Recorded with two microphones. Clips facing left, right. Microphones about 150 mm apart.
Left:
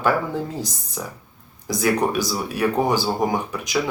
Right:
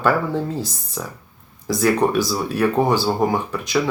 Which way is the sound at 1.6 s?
15° left (ahead or behind).